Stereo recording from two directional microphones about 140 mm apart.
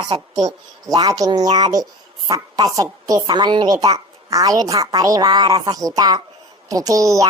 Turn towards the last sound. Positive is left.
turn(degrees=-25)  # may be behind; listen again after turning